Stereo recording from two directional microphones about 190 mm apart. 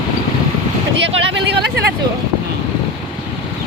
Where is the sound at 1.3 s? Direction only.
60° right (ahead or behind).